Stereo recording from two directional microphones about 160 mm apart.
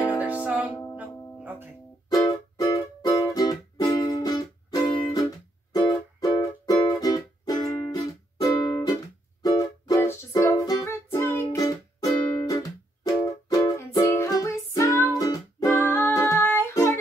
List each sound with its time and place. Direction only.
0.2 s music: 10° right (ahead or behind)
2.1 s music: 20° left (ahead or behind)
15.7 s music: 15° left (ahead or behind)